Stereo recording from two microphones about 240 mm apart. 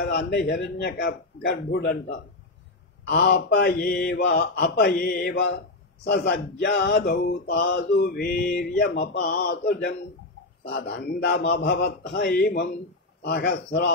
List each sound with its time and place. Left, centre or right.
0.0 s speech: left
3.1 s mantra: left
6.1 s speech: left
8.5 s mantra: left
10.7 s speech: left